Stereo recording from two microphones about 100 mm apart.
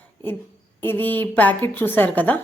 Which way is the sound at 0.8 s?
20° left (ahead or behind).